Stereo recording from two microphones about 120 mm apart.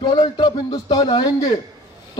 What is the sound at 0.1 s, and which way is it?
A man's voice, 35° left (ahead or behind).